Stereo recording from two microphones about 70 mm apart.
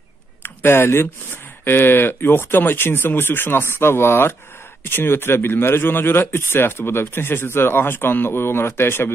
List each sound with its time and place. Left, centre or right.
0.4 s speech: left